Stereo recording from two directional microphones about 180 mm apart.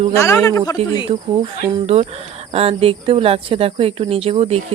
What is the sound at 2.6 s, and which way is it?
Speech, 30° right (ahead or behind).